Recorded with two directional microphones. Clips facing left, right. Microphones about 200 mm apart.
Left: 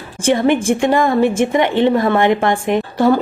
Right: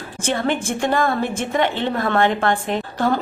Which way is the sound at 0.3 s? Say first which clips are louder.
Left 8 dB; 15° left (ahead or behind).